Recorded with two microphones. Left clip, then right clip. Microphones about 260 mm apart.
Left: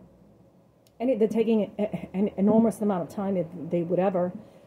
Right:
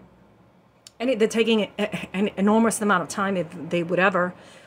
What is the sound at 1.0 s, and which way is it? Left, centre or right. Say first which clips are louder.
Speech: right 3 dB; centre.